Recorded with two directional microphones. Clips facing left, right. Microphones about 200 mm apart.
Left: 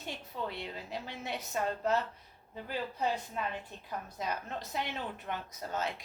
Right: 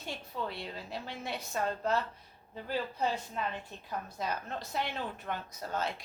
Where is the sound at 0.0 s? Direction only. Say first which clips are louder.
Right 1 dB; 15° left (ahead or behind).